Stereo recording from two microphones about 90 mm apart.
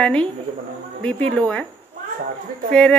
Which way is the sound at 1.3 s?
10° left (ahead or behind).